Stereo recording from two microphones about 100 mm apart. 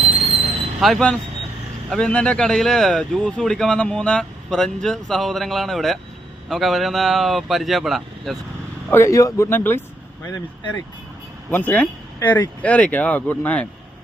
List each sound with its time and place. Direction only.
0.0 s vehicle: 80° right
0.8 s speech: centre (ahead or behind)
8.9 s a man's voice: 25° left (ahead or behind)
11.5 s speech: 15° left (ahead or behind)